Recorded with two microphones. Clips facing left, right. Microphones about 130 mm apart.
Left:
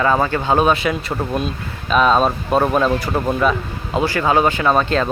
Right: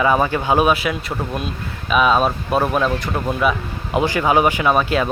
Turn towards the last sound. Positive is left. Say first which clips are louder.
# left 1 dB
turn(degrees=-10)  # may be behind; listen again after turning